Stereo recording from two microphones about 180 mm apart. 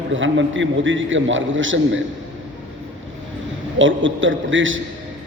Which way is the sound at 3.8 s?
90° right.